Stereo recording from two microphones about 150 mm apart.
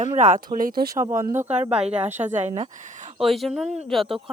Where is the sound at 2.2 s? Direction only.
50° right (ahead or behind).